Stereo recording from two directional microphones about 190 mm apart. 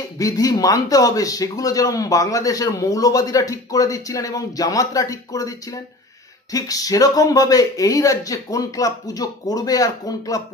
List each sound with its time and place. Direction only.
0.2 s a man's voice: 20° left (ahead or behind)